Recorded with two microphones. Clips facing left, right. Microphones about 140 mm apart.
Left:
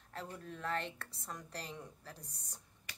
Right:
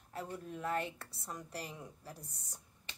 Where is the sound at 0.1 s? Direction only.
10° right (ahead or behind).